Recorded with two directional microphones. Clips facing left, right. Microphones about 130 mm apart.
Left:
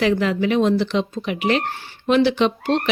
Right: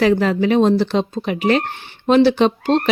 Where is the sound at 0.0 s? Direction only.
40° right (ahead or behind).